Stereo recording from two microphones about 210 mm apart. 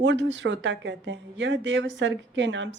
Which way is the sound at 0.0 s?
60° right (ahead or behind).